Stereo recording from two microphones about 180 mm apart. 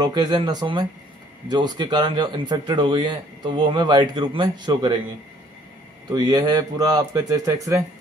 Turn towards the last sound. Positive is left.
turn(degrees=-20)  # may be behind; listen again after turning